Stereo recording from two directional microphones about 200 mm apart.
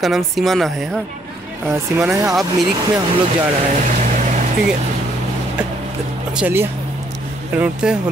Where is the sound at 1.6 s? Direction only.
15° right (ahead or behind).